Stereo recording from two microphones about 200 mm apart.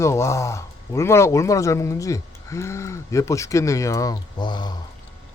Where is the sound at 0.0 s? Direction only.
15° left (ahead or behind).